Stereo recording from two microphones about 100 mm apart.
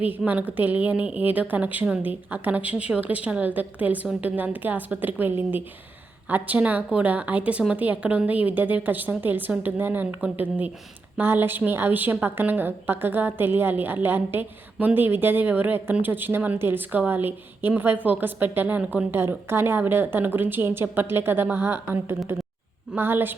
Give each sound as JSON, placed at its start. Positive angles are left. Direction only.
{"t": 0.3, "sound": "a woman's voice", "side_deg": -15}
{"t": 23.0, "sound": "a woman's voice", "side_deg": -20}